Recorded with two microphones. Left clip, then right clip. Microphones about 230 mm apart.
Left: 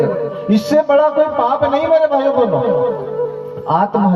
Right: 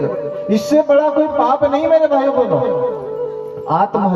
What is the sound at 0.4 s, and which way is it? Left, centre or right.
A man's voice, left.